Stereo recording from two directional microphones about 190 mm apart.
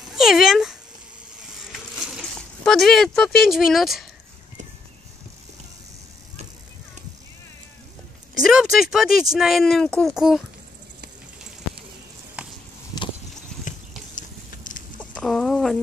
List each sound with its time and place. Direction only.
0.1 s speech: centre (ahead or behind)
2.1 s speech: centre (ahead or behind)
8.4 s a child's voice: centre (ahead or behind)
12.4 s a sound: 5° right (ahead or behind)
13.7 s a sound: 45° left (ahead or behind)
15.0 s chicken: 5° left (ahead or behind)